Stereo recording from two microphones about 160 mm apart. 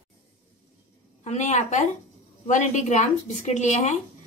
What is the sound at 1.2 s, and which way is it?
Speech, 45° left (ahead or behind).